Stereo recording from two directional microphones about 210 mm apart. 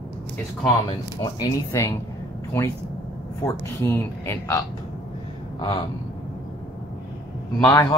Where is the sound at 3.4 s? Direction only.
10° left (ahead or behind).